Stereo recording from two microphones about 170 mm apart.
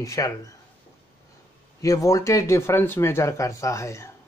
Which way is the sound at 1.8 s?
20° left (ahead or behind).